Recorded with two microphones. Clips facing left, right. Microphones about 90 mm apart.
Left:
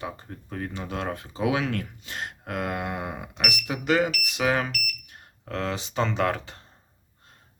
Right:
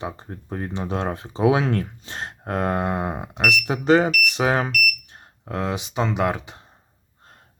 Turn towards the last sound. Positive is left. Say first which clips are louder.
# right 2 dB
turn(degrees=-15)  # may be behind; listen again after turning